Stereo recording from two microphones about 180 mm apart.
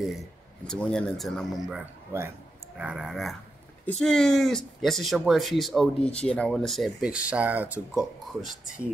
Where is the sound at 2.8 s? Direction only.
5° right (ahead or behind).